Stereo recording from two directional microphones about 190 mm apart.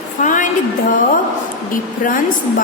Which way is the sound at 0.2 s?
40° left (ahead or behind).